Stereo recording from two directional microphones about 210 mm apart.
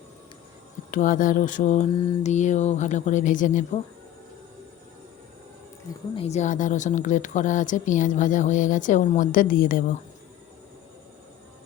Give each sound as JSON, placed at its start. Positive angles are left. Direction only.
{"t": 0.9, "sound": "speech", "side_deg": 40}
{"t": 6.1, "sound": "speech", "side_deg": 30}